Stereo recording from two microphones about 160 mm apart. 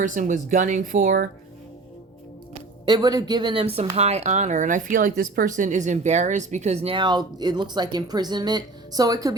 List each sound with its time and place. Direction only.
0.0 s speech: 55° right (ahead or behind)
2.8 s speech: 25° right (ahead or behind)